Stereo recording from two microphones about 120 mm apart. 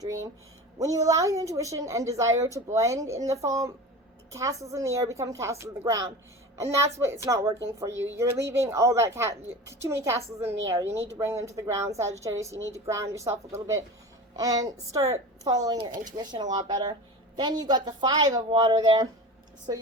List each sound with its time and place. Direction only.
0.0 s a woman's voice: 25° right (ahead or behind)